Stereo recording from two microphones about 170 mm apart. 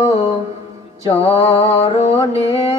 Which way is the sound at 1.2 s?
35° left (ahead or behind).